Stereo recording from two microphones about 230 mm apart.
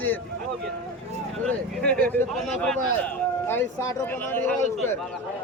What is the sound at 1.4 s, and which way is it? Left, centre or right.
A man's voice, centre.